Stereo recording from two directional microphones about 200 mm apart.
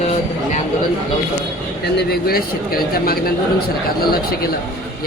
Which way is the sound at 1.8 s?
55° left (ahead or behind).